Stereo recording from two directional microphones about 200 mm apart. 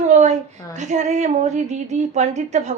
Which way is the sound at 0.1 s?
35° right (ahead or behind).